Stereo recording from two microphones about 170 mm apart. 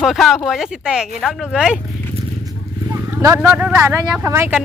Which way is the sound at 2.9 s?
15° right (ahead or behind).